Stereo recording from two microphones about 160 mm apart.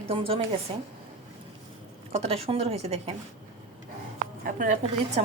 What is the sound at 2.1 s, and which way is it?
Speech, 40° right (ahead or behind).